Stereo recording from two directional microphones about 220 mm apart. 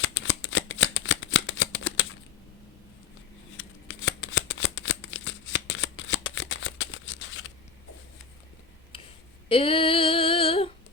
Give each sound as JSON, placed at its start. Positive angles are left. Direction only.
{"t": 0.0, "sound": "shuffling cards", "side_deg": 60}
{"t": 3.8, "sound": "shuffling cards", "side_deg": 60}
{"t": 8.9, "sound": "a sound", "side_deg": 25}
{"t": 9.5, "sound": "female singing", "side_deg": 25}